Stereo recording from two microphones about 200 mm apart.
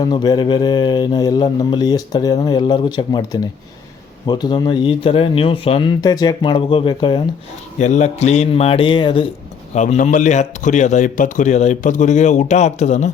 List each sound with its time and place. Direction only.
0.0 s mantra: 20° left (ahead or behind)
4.3 s mantra: 20° left (ahead or behind)
7.8 s a man's voice: 35° left (ahead or behind)
9.7 s a man's voice: 35° left (ahead or behind)